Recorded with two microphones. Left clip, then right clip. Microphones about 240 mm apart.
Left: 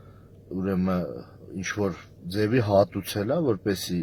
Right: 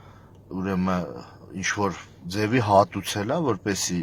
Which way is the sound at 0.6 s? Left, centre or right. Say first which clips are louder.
Right 1 dB; right.